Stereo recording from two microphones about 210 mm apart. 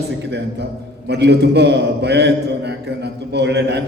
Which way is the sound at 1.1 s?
55° right (ahead or behind).